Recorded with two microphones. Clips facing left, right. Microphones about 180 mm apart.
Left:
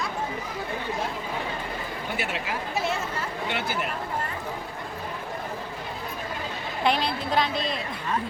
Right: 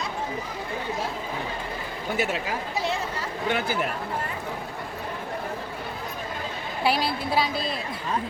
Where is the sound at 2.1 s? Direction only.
40° right (ahead or behind).